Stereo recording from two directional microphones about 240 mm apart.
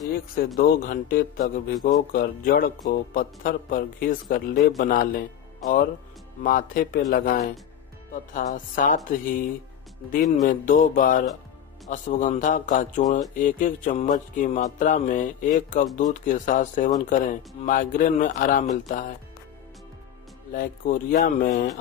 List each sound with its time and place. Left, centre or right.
0.6 s speech: left
6.4 s speech: left
10.5 s speech: left
20.5 s speech: left